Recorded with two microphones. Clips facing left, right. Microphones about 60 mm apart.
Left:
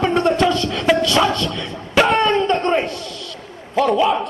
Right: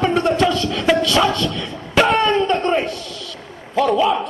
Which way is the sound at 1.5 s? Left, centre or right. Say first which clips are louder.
Even; centre.